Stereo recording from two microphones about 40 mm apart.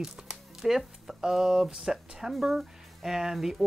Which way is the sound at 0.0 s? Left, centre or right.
Centre.